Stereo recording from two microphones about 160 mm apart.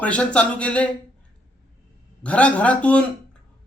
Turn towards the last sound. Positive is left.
turn(degrees=10)  # may be behind; listen again after turning